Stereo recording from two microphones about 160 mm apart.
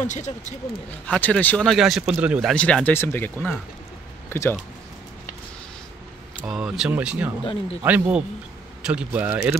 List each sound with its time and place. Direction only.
0.0 s speech: 50° left (ahead or behind)
1.0 s a man's voice: 10° left (ahead or behind)
2.5 s speech: 5° left (ahead or behind)
6.4 s a man's voice: 5° right (ahead or behind)